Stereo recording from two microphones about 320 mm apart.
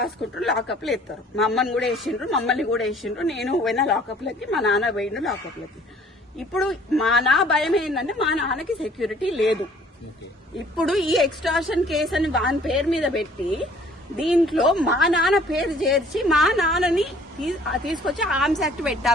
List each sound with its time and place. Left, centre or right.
0.0 s speech: centre
6.5 s speech: centre
10.8 s speech: centre